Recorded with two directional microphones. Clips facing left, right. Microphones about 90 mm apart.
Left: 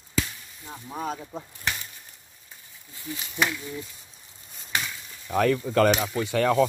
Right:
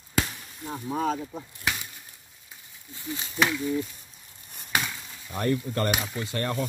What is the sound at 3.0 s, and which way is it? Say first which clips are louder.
Speech: right 1 dB; 25° right (ahead or behind).